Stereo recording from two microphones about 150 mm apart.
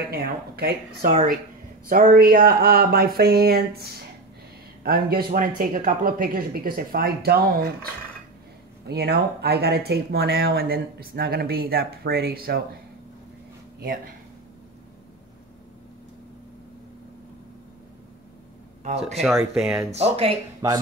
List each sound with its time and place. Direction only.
0.1 s speech: 90° right
1.1 s speech: 65° right (ahead or behind)
5.6 s speech: 60° right (ahead or behind); by 12.6 s 90° right
18.9 s speech: 45° right (ahead or behind)
19.5 s speech: 5° right (ahead or behind)
19.9 s speech: 45° right (ahead or behind)